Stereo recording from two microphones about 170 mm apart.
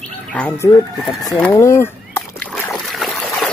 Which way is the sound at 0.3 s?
5° left (ahead or behind).